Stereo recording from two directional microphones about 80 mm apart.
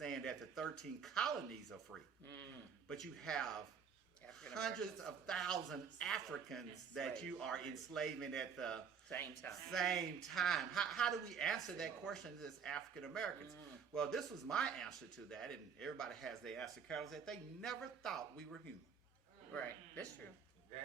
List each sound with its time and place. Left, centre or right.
0.0 s speech: centre
2.2 s speech: left
2.9 s speech: centre
9.1 s speech: left
9.5 s speech: centre
19.5 s a man's voice: centre